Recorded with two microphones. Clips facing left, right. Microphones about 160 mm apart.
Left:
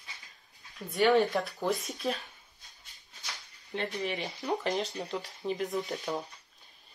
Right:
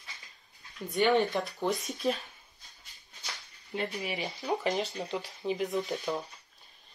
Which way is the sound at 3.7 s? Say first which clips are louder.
Left 1 dB; 5° right (ahead or behind).